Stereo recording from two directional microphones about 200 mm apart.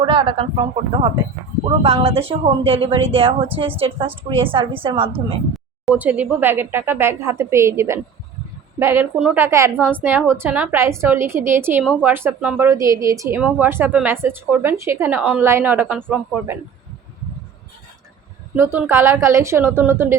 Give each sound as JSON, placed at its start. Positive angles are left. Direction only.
{"t": 0.0, "sound": "a woman's voice", "side_deg": -25}
{"t": 5.8, "sound": "a woman's voice", "side_deg": -5}
{"t": 18.5, "sound": "a woman's voice", "side_deg": -10}